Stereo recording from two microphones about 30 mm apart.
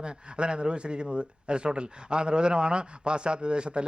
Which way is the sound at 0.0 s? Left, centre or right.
Right.